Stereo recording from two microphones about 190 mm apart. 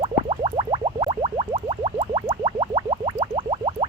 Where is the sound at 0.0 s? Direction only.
30° right (ahead or behind).